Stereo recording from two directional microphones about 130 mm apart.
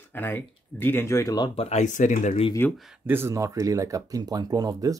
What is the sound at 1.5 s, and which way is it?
Speech, 55° left (ahead or behind).